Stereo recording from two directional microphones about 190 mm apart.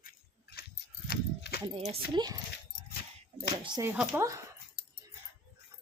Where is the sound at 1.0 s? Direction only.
55° left (ahead or behind).